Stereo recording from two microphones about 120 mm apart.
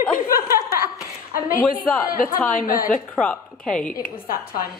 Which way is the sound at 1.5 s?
20° left (ahead or behind).